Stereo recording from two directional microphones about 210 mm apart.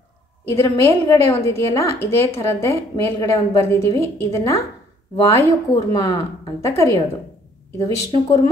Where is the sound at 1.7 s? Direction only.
15° left (ahead or behind).